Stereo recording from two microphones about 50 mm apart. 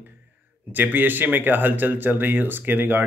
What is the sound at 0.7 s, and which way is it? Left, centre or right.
A man's voice, right.